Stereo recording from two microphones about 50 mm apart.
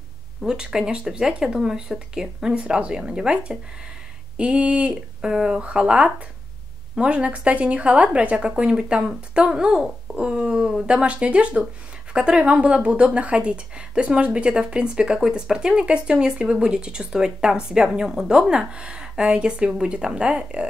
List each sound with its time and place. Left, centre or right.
0.4 s a woman's voice: centre